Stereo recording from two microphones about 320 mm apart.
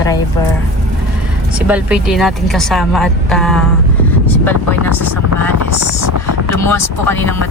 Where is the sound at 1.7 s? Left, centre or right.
Centre.